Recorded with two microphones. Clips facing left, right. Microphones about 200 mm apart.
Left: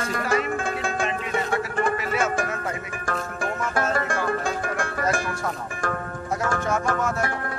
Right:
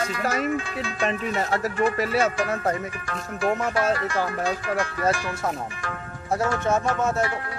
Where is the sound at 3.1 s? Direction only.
50° left (ahead or behind).